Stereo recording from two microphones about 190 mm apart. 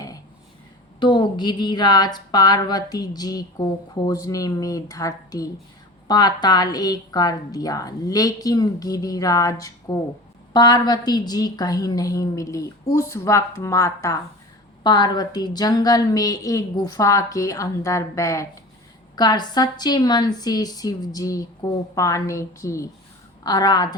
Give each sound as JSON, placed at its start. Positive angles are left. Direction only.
{"t": 0.9, "sound": "a woman's voice", "side_deg": 25}